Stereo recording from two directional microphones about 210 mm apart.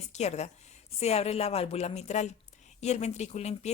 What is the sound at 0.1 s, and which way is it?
A woman's voice, 30° left (ahead or behind).